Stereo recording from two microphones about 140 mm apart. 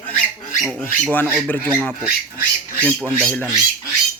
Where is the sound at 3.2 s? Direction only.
5° left (ahead or behind).